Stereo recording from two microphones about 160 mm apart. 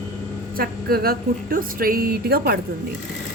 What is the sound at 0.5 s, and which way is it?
Speech, 70° right (ahead or behind).